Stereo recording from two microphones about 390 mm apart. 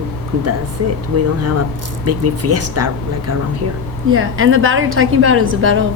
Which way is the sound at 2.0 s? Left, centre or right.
Right.